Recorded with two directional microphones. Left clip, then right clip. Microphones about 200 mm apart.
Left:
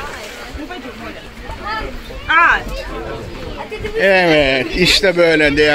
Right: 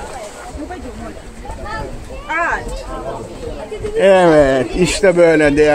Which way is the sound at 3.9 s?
5° right (ahead or behind).